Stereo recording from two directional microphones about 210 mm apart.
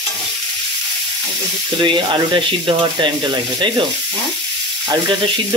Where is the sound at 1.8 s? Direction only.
20° right (ahead or behind).